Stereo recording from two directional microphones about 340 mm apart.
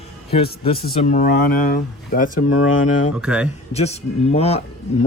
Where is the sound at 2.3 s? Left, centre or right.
Left.